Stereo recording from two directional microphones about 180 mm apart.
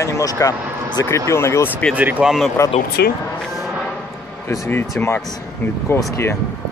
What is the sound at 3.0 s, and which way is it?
Speech, 65° left (ahead or behind).